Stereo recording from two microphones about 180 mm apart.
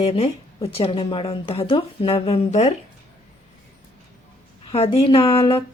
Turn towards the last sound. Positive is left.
turn(degrees=30)  # may be behind; listen again after turning